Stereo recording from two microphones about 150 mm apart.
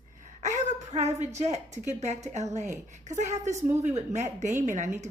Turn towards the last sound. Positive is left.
turn(degrees=-55)  # may be behind; listen again after turning